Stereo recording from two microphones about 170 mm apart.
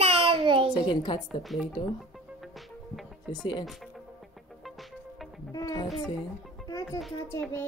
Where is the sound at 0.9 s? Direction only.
25° left (ahead or behind).